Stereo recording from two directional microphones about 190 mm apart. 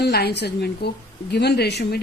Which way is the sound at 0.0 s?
60° left (ahead or behind).